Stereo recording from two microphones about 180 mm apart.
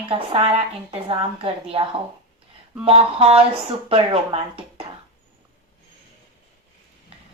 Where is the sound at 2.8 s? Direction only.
35° right (ahead or behind).